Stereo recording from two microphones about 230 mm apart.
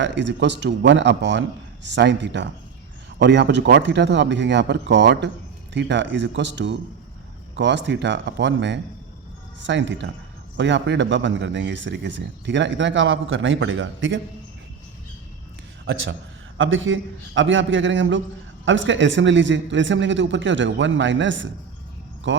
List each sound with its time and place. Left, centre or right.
0.0 s speech: right
16.6 s a man's voice: right